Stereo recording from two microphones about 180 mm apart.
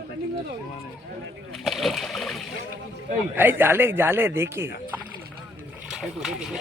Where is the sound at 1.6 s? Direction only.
Centre (ahead or behind).